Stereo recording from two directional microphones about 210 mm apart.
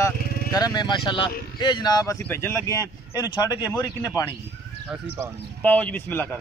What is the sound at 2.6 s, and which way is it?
Speech, 15° right (ahead or behind).